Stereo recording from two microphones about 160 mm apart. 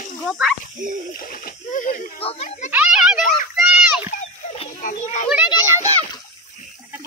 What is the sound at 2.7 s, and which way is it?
Children playing, 5° right (ahead or behind).